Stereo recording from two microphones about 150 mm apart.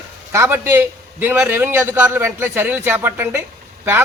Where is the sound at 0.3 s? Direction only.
15° right (ahead or behind).